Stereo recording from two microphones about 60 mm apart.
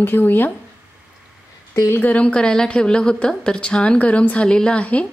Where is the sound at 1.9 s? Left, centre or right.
Left.